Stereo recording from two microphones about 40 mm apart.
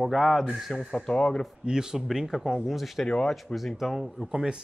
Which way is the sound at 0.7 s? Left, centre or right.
Centre.